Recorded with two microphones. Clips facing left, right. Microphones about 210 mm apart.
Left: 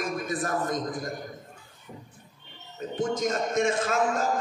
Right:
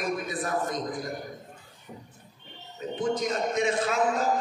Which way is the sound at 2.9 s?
45° left (ahead or behind).